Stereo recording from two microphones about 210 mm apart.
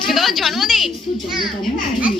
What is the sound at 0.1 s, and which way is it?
A woman's voice, centre (ahead or behind).